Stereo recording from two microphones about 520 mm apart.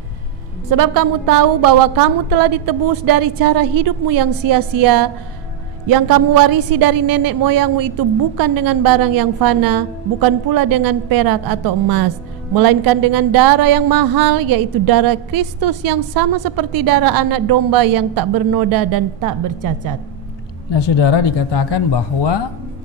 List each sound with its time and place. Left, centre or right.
0.7 s a woman's voice: right
20.7 s speech: left